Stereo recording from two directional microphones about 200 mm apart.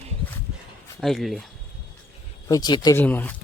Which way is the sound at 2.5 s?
20° left (ahead or behind).